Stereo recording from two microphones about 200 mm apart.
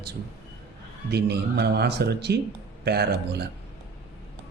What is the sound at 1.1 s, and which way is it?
Speech, 55° right (ahead or behind).